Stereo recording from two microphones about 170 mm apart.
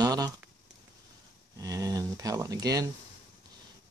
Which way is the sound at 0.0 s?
20° right (ahead or behind).